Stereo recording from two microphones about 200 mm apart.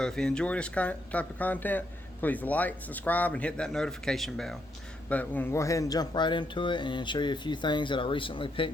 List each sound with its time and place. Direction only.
0.0 s speech: 5° left (ahead or behind); by 8.7 s 25° left (ahead or behind)